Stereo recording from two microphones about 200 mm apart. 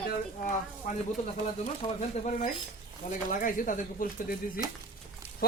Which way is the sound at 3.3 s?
40° left (ahead or behind).